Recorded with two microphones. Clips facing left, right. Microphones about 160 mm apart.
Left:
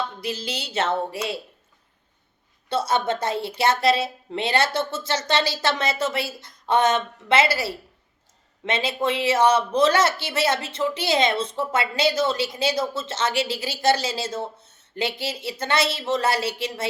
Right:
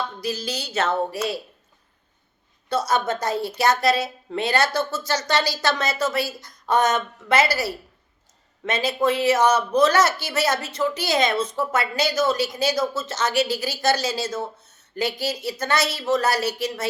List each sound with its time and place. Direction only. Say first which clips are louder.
0.2 s speech: right 2 dB; 25° left (ahead or behind)
2.6 s speech: even; 25° left (ahead or behind)